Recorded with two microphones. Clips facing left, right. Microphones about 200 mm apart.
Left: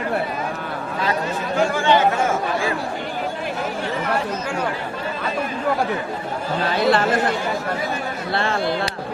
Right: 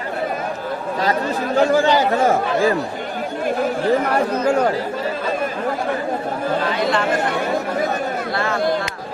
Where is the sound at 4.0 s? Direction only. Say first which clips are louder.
Right 5 dB; 60° right (ahead or behind).